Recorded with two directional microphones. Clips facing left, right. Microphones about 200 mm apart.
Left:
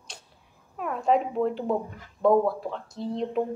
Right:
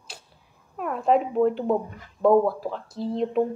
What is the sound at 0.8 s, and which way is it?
Speech, centre (ahead or behind).